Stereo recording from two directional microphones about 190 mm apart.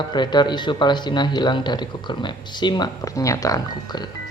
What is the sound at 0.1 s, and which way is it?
A man's voice, 25° left (ahead or behind).